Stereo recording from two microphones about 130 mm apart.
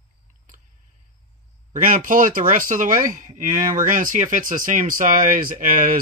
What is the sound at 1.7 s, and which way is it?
Speech, 90° right.